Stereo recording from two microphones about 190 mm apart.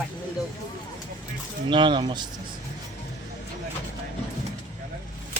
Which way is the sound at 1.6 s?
25° right (ahead or behind).